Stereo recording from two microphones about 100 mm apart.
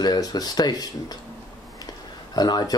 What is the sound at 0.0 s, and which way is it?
Speech, 40° left (ahead or behind).